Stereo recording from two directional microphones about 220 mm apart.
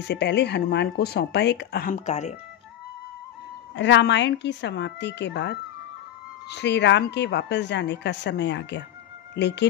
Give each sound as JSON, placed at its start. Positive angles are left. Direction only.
{"t": 0.0, "sound": "speech", "side_deg": 50}
{"t": 3.7, "sound": "speech", "side_deg": 55}